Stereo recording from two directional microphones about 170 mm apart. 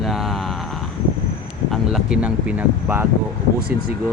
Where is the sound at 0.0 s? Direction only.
Centre (ahead or behind).